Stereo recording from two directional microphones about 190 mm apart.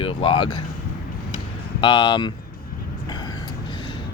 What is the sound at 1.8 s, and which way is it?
Speech, 25° left (ahead or behind).